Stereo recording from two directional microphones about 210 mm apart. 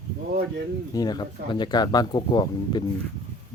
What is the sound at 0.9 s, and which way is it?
Speech, 20° left (ahead or behind).